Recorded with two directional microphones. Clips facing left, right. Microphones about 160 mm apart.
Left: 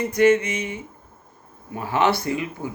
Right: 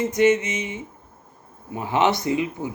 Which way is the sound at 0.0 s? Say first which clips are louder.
Left 1 dB; 20° right (ahead or behind).